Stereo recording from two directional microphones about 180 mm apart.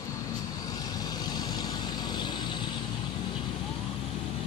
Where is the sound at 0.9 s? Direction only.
20° left (ahead or behind).